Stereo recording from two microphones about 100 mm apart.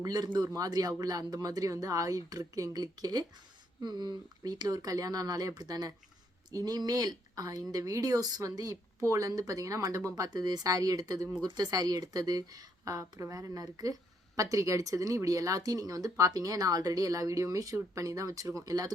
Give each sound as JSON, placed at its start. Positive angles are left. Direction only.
{"t": 0.0, "sound": "speech", "side_deg": -40}